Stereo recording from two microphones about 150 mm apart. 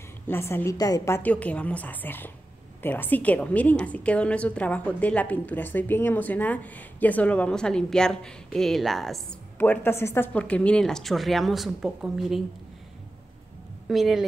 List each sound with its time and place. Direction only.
0.3 s a woman's voice: 15° left (ahead or behind)
9.6 s a woman's voice: 15° left (ahead or behind)
13.8 s a woman's voice: centre (ahead or behind)